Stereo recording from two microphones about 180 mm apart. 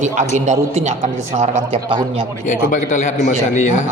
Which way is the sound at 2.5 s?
45° left (ahead or behind).